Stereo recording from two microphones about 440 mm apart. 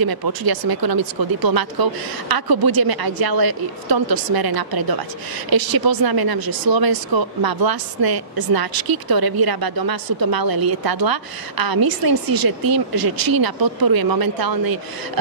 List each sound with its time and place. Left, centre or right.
0.0 s speech: right